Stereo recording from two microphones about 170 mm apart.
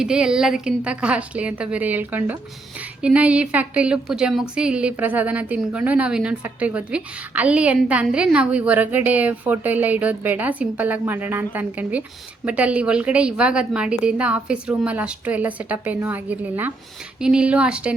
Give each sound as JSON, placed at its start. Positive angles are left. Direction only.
{"t": 0.0, "sound": "a woman's voice", "side_deg": -5}